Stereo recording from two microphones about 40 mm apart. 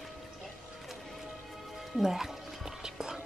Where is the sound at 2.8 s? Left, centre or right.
Centre.